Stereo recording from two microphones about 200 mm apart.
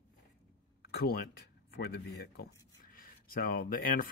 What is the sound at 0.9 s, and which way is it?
Speech, 50° left (ahead or behind).